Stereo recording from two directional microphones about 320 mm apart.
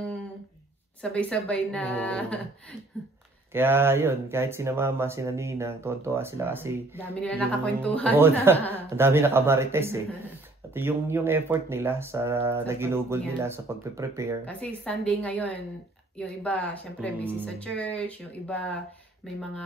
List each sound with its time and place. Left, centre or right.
1.0 s speech: centre
3.5 s speech: centre
7.1 s speech: centre
8.7 s speech: centre
14.4 s speech: centre